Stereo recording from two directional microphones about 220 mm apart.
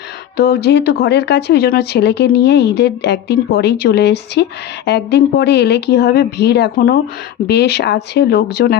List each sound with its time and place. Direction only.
0.3 s speech: 45° left (ahead or behind)